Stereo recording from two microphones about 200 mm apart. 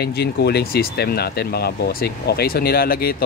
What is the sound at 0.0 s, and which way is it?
Speech, 55° left (ahead or behind).